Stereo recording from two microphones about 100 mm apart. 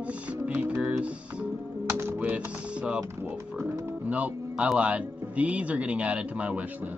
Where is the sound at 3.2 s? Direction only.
25° right (ahead or behind).